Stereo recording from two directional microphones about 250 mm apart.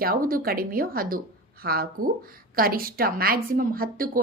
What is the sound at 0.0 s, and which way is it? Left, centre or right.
A woman's voice, right.